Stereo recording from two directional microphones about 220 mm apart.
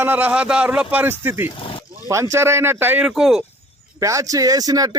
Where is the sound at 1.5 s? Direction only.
25° left (ahead or behind).